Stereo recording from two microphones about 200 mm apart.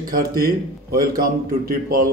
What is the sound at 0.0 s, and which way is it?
Speech, 45° right (ahead or behind).